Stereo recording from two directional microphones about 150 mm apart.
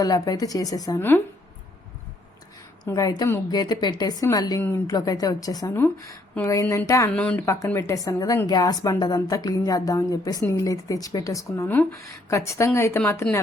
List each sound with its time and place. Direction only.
0.0 s a woman's voice: 25° left (ahead or behind)
2.8 s a woman's voice: 20° left (ahead or behind)
7.2 s speech: 5° left (ahead or behind)
7.4 s a woman's voice: 20° left (ahead or behind)